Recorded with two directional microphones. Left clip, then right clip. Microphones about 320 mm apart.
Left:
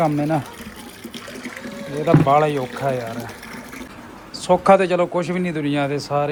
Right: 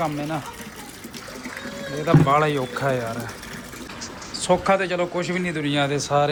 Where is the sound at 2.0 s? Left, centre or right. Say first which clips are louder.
Left 3 dB; centre.